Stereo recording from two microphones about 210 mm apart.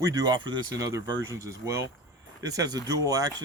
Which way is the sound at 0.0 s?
20° right (ahead or behind).